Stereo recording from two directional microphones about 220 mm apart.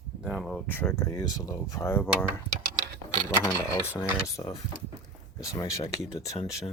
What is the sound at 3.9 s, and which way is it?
Speech, 15° left (ahead or behind).